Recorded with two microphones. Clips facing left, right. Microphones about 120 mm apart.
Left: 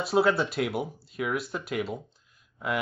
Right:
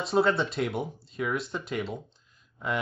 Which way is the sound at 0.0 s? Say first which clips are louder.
Left 1 dB; 5° left (ahead or behind).